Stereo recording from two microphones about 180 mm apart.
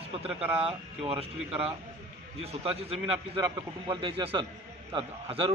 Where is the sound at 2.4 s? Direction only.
35° right (ahead or behind).